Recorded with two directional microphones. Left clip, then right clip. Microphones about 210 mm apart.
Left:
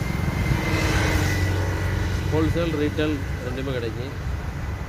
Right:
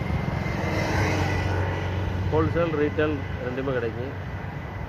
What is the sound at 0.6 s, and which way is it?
Vehicle, 50° right (ahead or behind).